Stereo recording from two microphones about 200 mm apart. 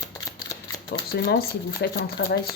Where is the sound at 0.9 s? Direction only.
50° left (ahead or behind).